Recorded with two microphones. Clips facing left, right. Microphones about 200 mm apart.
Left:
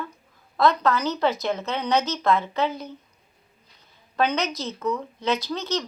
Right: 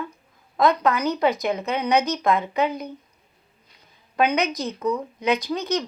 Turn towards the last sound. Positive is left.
turn(degrees=-15)  # may be behind; listen again after turning